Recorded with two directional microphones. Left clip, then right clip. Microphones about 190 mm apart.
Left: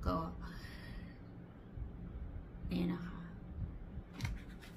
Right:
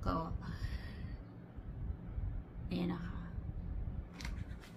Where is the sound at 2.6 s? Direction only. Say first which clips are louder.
Even; centre (ahead or behind).